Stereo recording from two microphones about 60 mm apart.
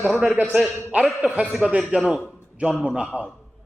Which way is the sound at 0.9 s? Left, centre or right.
Centre.